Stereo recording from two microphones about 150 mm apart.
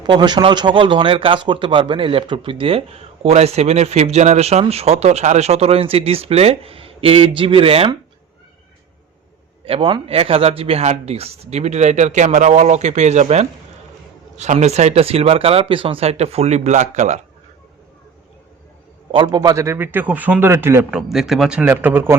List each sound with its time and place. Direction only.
0.0 s a man's voice: 30° right (ahead or behind)
9.6 s speech: 35° right (ahead or behind)
19.1 s a man's voice: 30° right (ahead or behind); by 21.0 s 15° right (ahead or behind)
21.1 s a man's voice: centre (ahead or behind)